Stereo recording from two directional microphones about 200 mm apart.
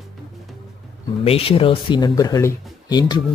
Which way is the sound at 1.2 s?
30° left (ahead or behind).